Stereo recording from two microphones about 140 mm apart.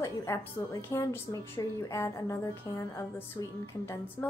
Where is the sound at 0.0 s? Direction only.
20° left (ahead or behind).